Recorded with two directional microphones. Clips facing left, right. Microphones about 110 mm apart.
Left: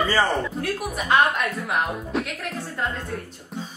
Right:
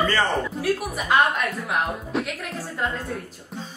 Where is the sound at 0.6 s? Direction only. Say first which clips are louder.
Right 2 dB; centre (ahead or behind).